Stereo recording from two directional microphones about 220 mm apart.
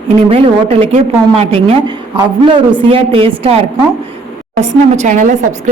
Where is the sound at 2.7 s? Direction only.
25° right (ahead or behind).